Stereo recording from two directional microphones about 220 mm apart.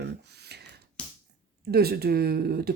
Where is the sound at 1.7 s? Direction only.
45° right (ahead or behind).